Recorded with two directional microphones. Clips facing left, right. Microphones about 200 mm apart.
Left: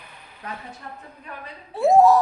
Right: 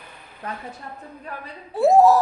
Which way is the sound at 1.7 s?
Centre (ahead or behind).